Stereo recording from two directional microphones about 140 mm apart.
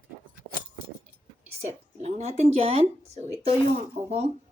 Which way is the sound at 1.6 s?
50° right (ahead or behind).